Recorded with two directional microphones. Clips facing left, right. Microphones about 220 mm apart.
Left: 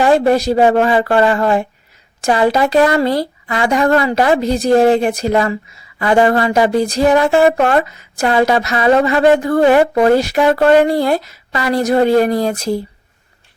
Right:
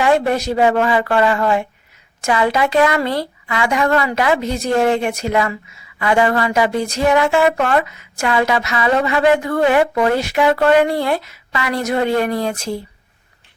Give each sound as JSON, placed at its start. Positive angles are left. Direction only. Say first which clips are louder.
{"t": 0.0, "sound": "a woman's voice", "louder": "left 4 dB", "side_deg": 35}